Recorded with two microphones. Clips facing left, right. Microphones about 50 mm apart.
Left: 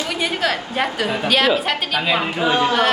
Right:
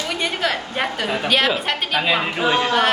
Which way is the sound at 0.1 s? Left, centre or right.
Centre.